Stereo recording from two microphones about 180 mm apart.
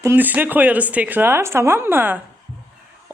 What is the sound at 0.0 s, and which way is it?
Speech, 10° right (ahead or behind).